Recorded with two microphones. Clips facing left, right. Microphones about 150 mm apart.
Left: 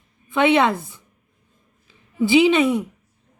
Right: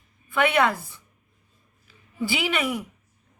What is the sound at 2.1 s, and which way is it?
Speech, 20° left (ahead or behind).